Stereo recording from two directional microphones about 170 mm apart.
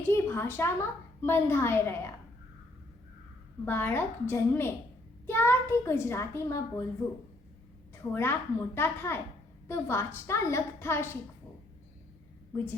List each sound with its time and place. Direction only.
0.1 s a woman's voice: 15° left (ahead or behind)
3.7 s a woman's voice: 10° left (ahead or behind)
8.1 s a woman's voice: 15° left (ahead or behind)